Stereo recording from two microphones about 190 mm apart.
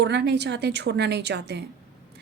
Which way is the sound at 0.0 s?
65° right (ahead or behind).